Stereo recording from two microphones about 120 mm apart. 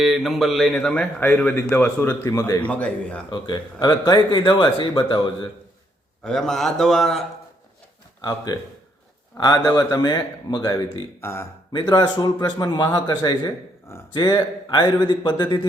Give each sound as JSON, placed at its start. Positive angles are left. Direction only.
{"t": 0.0, "sound": "a man's voice", "side_deg": 0}
{"t": 2.6, "sound": "a man's voice", "side_deg": 10}
{"t": 3.2, "sound": "speech", "side_deg": 40}
{"t": 6.2, "sound": "a man's voice", "side_deg": 5}
{"t": 8.5, "sound": "speech", "side_deg": 35}
{"t": 11.2, "sound": "speech", "side_deg": 20}
{"t": 11.7, "sound": "speech", "side_deg": 35}
{"t": 13.4, "sound": "speech", "side_deg": 20}
{"t": 14.1, "sound": "speech", "side_deg": 35}